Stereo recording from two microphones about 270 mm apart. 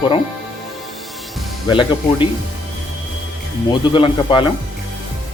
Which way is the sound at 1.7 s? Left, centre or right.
Centre.